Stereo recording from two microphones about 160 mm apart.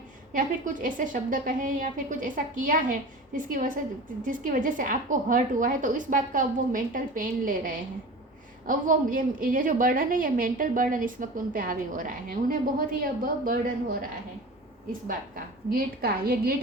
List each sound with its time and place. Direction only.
0.3 s a woman's voice: 55° right (ahead or behind)
15.7 s a woman's voice: 70° right (ahead or behind)